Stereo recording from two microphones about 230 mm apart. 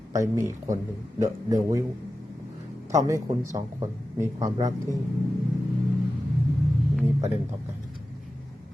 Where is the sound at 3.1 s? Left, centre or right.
Centre.